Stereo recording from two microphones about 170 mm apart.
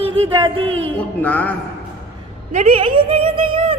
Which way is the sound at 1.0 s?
10° left (ahead or behind).